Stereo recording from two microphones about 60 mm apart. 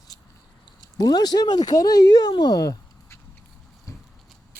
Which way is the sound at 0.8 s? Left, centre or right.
Left.